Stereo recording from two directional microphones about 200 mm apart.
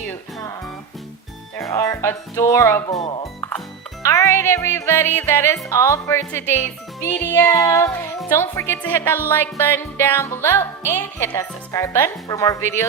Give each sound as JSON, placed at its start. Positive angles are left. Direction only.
{"t": 1.5, "sound": "music", "side_deg": 15}
{"t": 3.0, "sound": "speech", "side_deg": 25}
{"t": 4.0, "sound": "music", "side_deg": 15}